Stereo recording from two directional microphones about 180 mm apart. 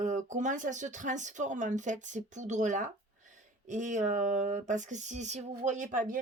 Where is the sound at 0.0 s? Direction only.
45° right (ahead or behind).